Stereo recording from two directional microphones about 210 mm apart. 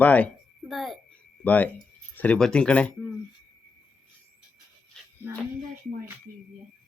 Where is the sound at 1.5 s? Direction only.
5° left (ahead or behind).